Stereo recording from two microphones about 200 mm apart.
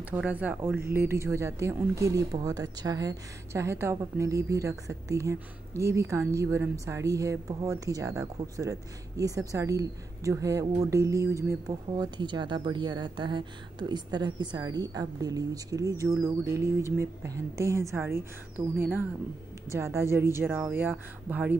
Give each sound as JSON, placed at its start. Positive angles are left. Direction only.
{"t": 0.1, "sound": "a woman's voice", "side_deg": -10}